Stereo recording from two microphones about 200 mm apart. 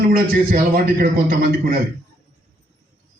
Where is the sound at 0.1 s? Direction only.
45° right (ahead or behind).